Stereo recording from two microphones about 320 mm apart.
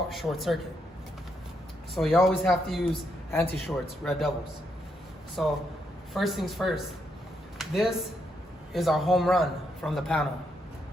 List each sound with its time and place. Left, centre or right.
0.1 s a man's voice: centre
2.0 s a man's voice: centre
5.4 s a man's voice: centre